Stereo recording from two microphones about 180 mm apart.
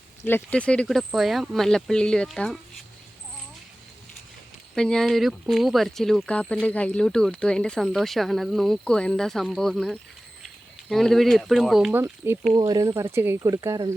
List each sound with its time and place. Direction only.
0.3 s speech: 10° left (ahead or behind)
4.7 s speech: 5° left (ahead or behind)
11.9 s speech: 10° right (ahead or behind)